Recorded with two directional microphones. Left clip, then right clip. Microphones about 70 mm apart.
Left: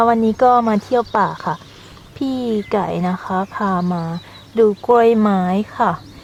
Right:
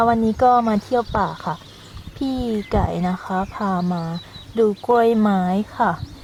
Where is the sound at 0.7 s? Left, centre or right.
Centre.